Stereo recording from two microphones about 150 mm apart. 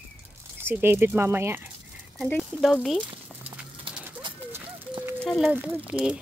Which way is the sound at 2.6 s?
Centre (ahead or behind).